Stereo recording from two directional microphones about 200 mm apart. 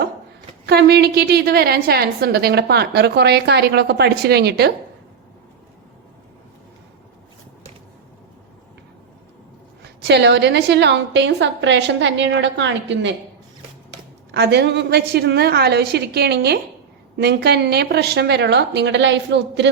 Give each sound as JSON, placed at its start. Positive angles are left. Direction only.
{"t": 0.6, "sound": "a woman's voice", "side_deg": -55}
{"t": 9.8, "sound": "a woman's voice", "side_deg": -55}
{"t": 14.3, "sound": "a woman's voice", "side_deg": -55}